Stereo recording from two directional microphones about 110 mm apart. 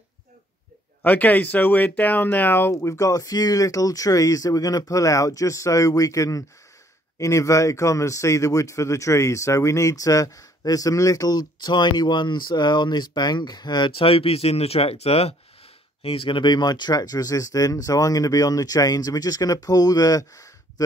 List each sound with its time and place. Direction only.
1.0 s a man's voice: 15° left (ahead or behind); by 15.3 s 65° left (ahead or behind)
16.0 s a man's voice: 55° left (ahead or behind); by 20.8 s 30° left (ahead or behind)